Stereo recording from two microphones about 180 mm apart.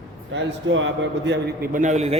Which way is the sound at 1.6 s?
45° right (ahead or behind).